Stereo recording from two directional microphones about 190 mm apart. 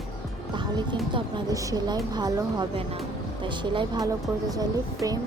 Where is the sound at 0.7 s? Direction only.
25° right (ahead or behind).